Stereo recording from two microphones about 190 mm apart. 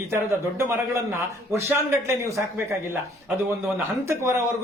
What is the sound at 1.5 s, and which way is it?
A man's voice, 15° right (ahead or behind).